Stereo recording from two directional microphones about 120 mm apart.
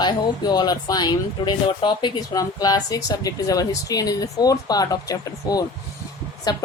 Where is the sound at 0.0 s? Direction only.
35° left (ahead or behind).